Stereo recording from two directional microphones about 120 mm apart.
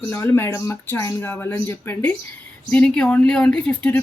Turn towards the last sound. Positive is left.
turn(degrees=10)  # may be behind; listen again after turning